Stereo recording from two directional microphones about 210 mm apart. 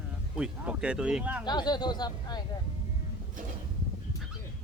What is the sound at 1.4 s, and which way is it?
Speech, 20° left (ahead or behind).